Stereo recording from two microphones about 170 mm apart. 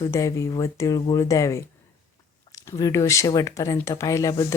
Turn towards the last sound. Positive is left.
turn(degrees=20)  # may be behind; listen again after turning